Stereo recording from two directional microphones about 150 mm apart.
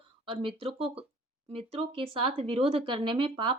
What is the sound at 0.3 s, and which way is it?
Speech, 35° right (ahead or behind).